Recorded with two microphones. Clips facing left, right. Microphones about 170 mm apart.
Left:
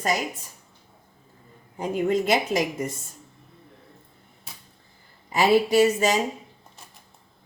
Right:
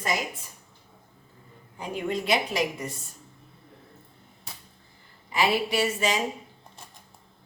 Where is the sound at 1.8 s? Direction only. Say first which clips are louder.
Left 7 dB; 50° left (ahead or behind).